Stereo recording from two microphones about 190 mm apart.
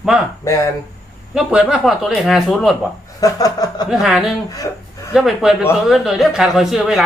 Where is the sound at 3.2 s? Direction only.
20° left (ahead or behind).